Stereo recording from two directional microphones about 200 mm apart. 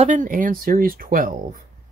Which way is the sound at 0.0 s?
40° right (ahead or behind).